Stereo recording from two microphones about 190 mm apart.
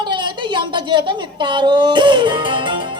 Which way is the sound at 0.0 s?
25° right (ahead or behind).